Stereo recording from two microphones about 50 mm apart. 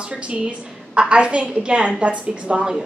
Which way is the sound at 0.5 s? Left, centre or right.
Right.